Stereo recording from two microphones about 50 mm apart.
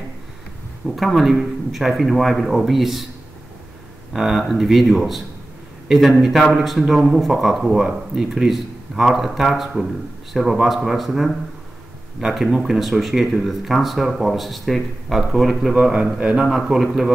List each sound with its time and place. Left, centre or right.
0.8 s speech: centre
4.1 s speech: centre
12.4 s speech: centre
15.7 s a man's voice: right
16.4 s a man's voice: centre